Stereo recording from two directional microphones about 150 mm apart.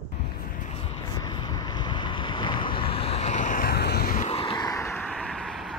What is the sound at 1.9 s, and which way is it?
Boat, 30° left (ahead or behind).